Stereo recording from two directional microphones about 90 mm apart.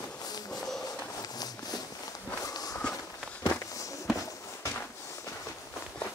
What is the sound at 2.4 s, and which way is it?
Walk, 45° left (ahead or behind).